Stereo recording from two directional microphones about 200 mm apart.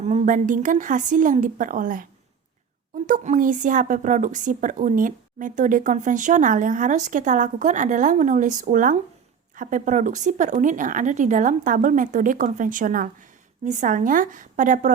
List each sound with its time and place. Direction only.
0.0 s a woman's voice: 35° right (ahead or behind)
3.1 s a woman's voice: 40° right (ahead or behind)